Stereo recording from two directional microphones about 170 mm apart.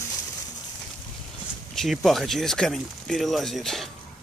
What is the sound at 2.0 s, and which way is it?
Speech, centre (ahead or behind).